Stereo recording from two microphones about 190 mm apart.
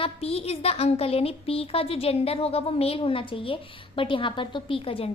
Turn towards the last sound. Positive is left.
turn(degrees=30)  # may be behind; listen again after turning